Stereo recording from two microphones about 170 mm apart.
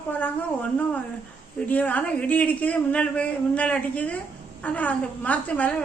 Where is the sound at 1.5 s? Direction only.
10° left (ahead or behind).